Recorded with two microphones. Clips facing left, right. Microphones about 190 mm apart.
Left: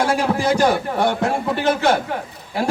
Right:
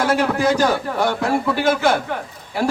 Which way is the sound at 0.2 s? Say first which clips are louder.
Even; 25° left (ahead or behind).